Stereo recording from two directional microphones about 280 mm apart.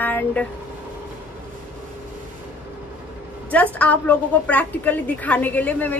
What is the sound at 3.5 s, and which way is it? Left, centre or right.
A woman's voice, centre.